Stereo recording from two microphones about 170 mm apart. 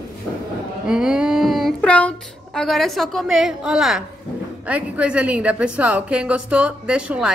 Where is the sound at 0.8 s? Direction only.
5° right (ahead or behind).